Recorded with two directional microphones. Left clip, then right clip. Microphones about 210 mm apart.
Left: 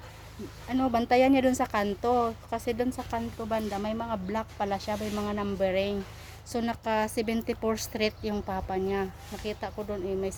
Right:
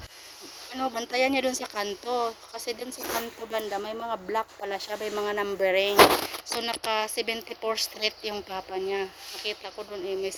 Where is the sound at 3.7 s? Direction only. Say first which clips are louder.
Right 1 dB; 25° right (ahead or behind).